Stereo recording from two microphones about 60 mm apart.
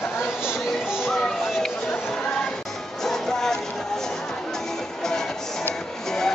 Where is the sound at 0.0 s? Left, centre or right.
Left.